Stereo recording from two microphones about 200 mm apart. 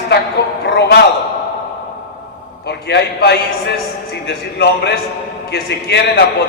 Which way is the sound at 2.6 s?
55° left (ahead or behind).